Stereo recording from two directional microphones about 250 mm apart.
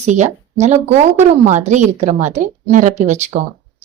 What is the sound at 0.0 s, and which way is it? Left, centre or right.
A woman's voice, right.